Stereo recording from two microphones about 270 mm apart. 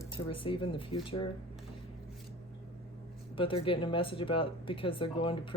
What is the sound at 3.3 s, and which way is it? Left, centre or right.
Speech, centre.